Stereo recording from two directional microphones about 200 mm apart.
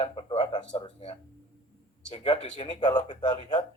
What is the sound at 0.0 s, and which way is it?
Speech, 25° left (ahead or behind).